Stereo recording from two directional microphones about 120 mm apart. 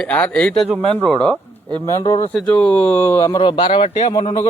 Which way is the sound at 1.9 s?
25° left (ahead or behind).